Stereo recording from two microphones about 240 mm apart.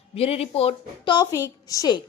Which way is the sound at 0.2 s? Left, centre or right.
Left.